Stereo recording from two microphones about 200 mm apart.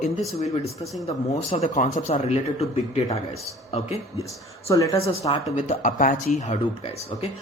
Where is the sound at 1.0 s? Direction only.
30° left (ahead or behind).